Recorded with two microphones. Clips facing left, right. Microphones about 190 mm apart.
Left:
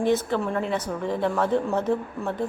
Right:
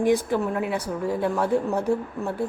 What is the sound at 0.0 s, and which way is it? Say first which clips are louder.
A woman's voice: right 2 dB; 15° right (ahead or behind).